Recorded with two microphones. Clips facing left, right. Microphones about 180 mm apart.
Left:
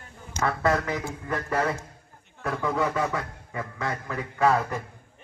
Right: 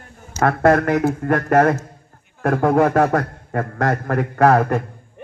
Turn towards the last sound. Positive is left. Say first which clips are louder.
# right 8 dB
turn(degrees=-65)  # may be behind; listen again after turning